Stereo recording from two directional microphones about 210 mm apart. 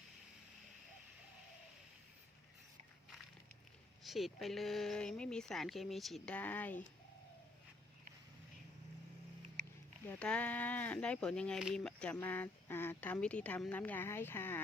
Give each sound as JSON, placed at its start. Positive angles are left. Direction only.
{"t": 4.0, "sound": "speech", "side_deg": 0}
{"t": 10.1, "sound": "speech", "side_deg": 5}